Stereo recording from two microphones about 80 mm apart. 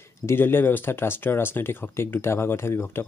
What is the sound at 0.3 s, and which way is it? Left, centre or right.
Speech, left.